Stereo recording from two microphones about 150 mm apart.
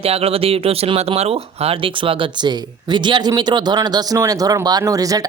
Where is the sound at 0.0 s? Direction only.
40° right (ahead or behind).